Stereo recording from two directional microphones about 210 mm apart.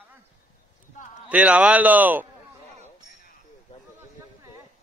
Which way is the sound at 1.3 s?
5° right (ahead or behind).